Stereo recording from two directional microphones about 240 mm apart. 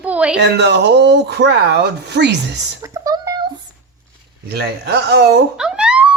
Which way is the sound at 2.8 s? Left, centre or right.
Centre.